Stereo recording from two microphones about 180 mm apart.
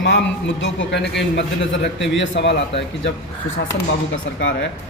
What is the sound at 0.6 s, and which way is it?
A man's voice, 75° left (ahead or behind).